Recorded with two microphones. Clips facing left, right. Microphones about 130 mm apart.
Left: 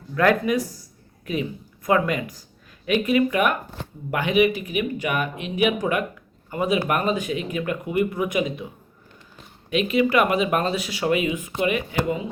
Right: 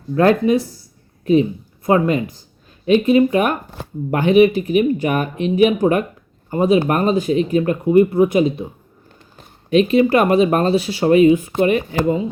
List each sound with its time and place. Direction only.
0.1 s speech: 30° right (ahead or behind)